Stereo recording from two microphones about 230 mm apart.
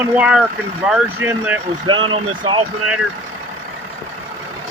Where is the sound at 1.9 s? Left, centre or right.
Right.